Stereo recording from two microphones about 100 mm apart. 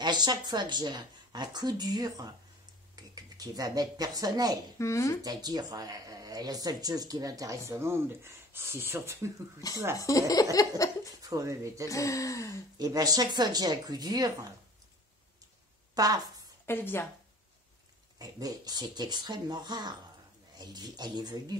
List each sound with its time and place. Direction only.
0.0 s a woman's voice: 45° right (ahead or behind)
4.7 s a woman's voice: 30° left (ahead or behind)
5.2 s speech: 40° right (ahead or behind)
9.6 s speech: 35° left (ahead or behind)
11.2 s speech: 35° right (ahead or behind)
11.9 s speech: 35° left (ahead or behind)
12.7 s speech: 40° right (ahead or behind)
15.9 s a woman's voice: 40° right (ahead or behind)
16.6 s a woman's voice: 25° left (ahead or behind)
18.2 s a woman's voice: 40° right (ahead or behind)